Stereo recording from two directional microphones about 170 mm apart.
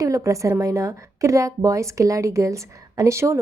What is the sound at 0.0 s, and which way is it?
A woman's voice, 20° right (ahead or behind).